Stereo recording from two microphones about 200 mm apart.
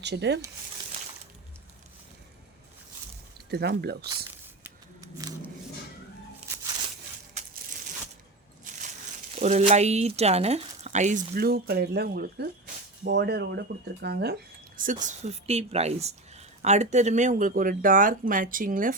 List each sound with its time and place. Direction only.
0.0 s speech: 60° right (ahead or behind)
3.5 s speech: 55° right (ahead or behind)
4.9 s a sound: 15° right (ahead or behind)
7.3 s crushing: 40° right (ahead or behind)
8.7 s a sound: 40° right (ahead or behind)
9.3 s speech: 35° right (ahead or behind)
11.3 s speech: 50° right (ahead or behind)